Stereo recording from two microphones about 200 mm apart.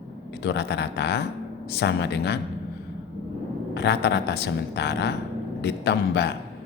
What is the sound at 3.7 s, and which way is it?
A man's voice, 60° left (ahead or behind).